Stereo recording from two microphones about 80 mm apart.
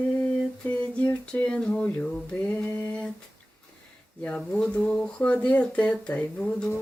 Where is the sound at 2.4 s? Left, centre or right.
Centre.